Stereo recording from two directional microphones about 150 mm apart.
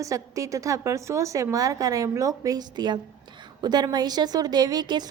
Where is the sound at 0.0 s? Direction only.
20° right (ahead or behind).